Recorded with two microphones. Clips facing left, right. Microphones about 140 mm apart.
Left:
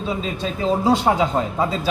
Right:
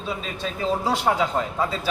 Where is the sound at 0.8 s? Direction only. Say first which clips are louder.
Left 6 dB; 20° left (ahead or behind).